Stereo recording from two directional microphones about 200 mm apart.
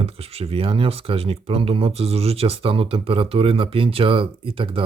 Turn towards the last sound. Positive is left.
turn(degrees=-25)  # may be behind; listen again after turning